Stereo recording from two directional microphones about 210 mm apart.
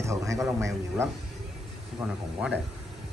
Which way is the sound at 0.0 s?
15° right (ahead or behind).